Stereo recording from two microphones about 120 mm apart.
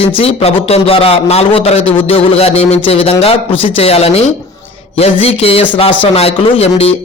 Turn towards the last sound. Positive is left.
turn(degrees=55)  # may be behind; listen again after turning